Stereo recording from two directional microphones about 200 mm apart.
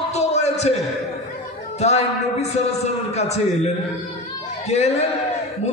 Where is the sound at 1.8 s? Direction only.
30° left (ahead or behind).